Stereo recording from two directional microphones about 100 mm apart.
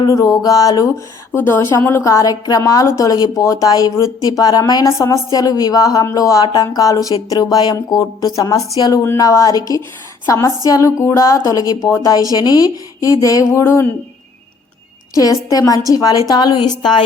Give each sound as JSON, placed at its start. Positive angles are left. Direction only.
{"t": 0.1, "sound": "a woman's voice", "side_deg": 35}
{"t": 1.4, "sound": "a woman's voice", "side_deg": 20}
{"t": 15.1, "sound": "a woman's voice", "side_deg": 35}